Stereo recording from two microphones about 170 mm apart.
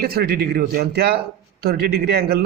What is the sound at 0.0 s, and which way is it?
Speech, 65° right (ahead or behind).